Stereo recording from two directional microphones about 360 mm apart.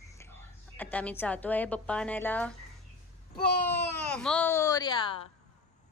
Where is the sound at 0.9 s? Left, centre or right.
Centre.